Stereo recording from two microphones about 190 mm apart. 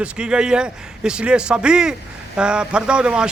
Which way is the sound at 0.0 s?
5° right (ahead or behind).